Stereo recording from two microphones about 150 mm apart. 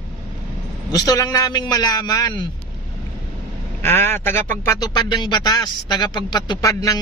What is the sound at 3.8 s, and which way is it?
Speech, 15° left (ahead or behind).